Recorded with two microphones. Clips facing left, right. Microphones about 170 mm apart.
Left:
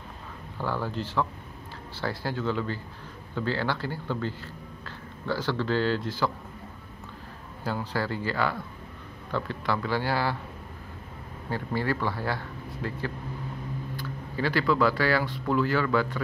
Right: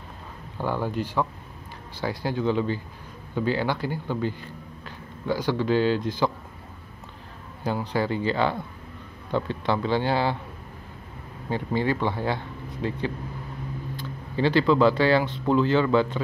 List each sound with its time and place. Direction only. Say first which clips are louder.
0.6 s speech: right 4 dB; 15° right (ahead or behind)
7.6 s speech: right 4 dB; 20° right (ahead or behind)
11.5 s speech: right 4 dB; 20° right (ahead or behind)